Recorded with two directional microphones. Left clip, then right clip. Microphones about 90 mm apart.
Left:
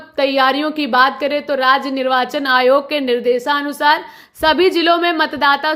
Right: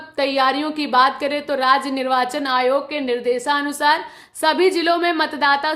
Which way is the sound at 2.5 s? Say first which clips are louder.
Left 8 dB; 45° left (ahead or behind).